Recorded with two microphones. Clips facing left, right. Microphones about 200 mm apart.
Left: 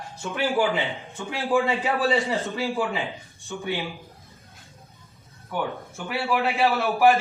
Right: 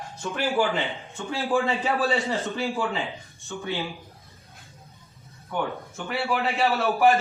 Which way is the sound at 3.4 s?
15° left (ahead or behind).